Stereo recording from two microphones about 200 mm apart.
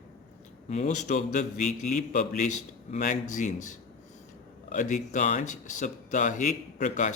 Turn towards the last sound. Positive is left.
turn(degrees=35)  # may be behind; listen again after turning